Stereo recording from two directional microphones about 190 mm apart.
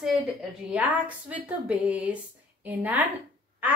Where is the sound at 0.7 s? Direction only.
10° right (ahead or behind).